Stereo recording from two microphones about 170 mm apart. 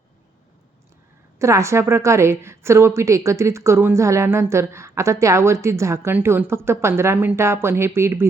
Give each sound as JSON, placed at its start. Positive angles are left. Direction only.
{"t": 1.4, "sound": "a woman's voice", "side_deg": -15}